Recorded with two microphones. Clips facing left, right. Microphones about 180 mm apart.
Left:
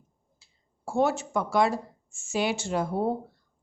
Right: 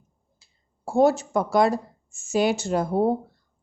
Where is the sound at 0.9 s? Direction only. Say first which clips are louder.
Right 6 dB; 35° right (ahead or behind).